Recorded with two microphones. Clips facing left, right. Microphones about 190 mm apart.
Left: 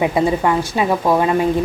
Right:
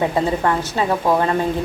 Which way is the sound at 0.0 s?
10° left (ahead or behind).